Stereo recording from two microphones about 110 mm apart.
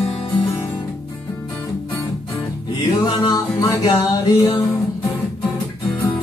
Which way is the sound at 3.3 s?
35° left (ahead or behind).